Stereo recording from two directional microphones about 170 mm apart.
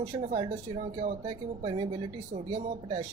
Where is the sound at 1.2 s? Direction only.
30° right (ahead or behind).